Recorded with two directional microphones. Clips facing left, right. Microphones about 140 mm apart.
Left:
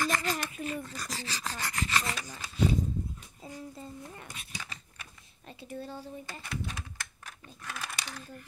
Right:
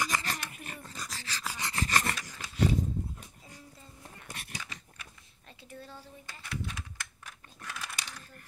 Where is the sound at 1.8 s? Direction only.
45° right (ahead or behind).